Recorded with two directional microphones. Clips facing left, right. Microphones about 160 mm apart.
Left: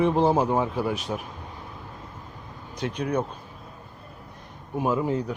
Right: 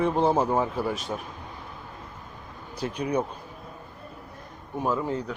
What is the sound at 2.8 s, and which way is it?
Speech, 5° right (ahead or behind).